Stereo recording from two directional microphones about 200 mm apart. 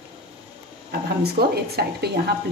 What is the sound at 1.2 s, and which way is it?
A woman's voice, 50° right (ahead or behind).